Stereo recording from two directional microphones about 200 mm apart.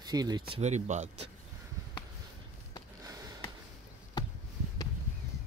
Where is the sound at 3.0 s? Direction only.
20° right (ahead or behind).